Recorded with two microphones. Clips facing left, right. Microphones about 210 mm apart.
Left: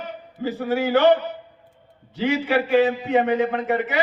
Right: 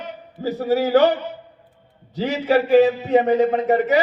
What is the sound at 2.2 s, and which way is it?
A man's voice, 40° right (ahead or behind).